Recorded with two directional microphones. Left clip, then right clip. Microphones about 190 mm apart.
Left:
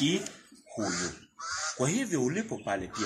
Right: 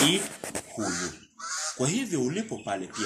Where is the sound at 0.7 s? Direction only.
15° right (ahead or behind).